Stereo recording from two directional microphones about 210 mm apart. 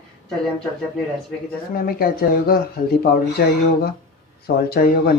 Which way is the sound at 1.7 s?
45° left (ahead or behind).